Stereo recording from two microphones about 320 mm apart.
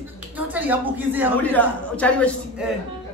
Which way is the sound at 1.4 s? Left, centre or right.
Centre.